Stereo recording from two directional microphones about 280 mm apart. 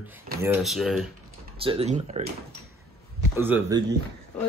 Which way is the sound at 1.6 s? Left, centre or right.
Right.